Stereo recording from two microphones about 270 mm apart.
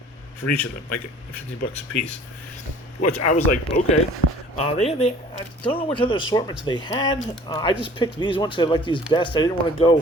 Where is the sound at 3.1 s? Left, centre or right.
Left.